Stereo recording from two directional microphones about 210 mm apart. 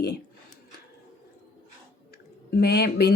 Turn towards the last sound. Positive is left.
turn(degrees=50)  # may be behind; listen again after turning